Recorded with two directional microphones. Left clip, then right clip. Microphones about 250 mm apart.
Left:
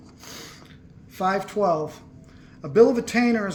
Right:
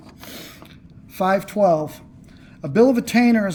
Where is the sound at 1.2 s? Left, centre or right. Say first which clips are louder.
Right 5 dB; right.